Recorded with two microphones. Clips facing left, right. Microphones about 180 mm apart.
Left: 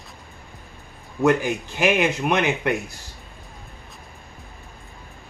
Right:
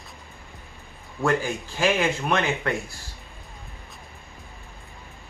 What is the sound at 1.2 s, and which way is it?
Speech, 20° left (ahead or behind).